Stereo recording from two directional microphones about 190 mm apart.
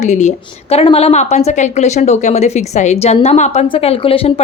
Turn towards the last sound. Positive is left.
turn(degrees=30)  # may be behind; listen again after turning